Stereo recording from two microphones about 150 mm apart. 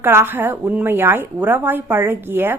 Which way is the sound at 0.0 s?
15° right (ahead or behind).